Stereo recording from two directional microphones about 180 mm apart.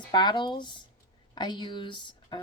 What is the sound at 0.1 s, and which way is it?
Speech, 25° left (ahead or behind).